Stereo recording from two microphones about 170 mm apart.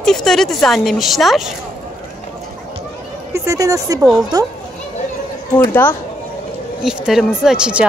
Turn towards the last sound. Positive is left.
turn(degrees=-5)  # may be behind; listen again after turning